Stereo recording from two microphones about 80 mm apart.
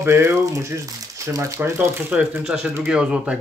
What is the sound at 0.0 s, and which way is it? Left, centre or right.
Speech, right.